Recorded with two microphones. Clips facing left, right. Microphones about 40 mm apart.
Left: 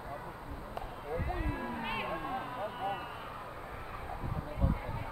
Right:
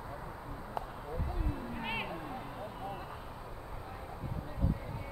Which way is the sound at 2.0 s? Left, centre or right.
Left.